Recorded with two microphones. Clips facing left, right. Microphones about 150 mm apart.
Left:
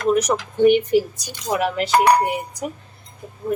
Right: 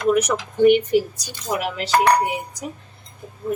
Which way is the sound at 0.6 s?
25° left (ahead or behind).